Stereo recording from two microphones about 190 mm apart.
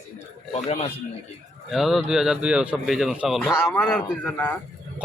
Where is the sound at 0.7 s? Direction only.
35° left (ahead or behind).